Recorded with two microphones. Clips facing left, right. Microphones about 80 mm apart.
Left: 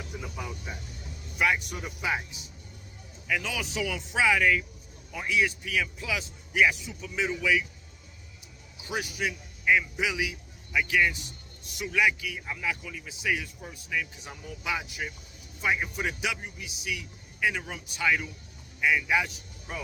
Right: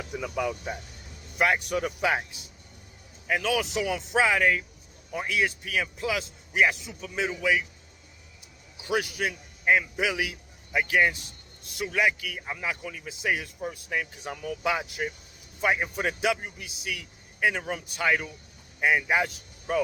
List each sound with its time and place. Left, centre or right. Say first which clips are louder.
0.0 s speech: right 8 dB; right
1.4 s speech: right 3 dB; right
3.6 s a man's voice: right 4 dB; right
8.9 s a man's voice: right 4 dB; right
10.7 s a man's voice: right 2 dB; right
12.4 s speech: even; right
12.8 s a man's voice: right 2 dB; right
14.4 s a man's voice: right 5 dB; right